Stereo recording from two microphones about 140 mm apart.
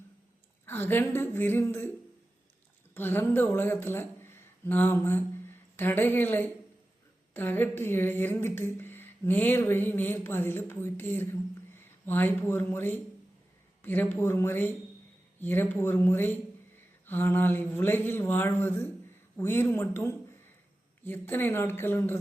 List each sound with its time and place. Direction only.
0.6 s speech: 15° left (ahead or behind)
2.9 s a woman's voice: 15° left (ahead or behind)